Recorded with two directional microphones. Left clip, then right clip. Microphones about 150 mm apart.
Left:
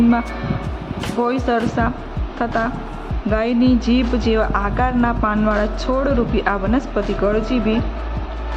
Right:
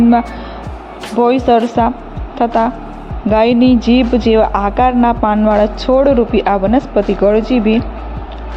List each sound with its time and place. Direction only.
1.2 s a woman's voice: 25° right (ahead or behind)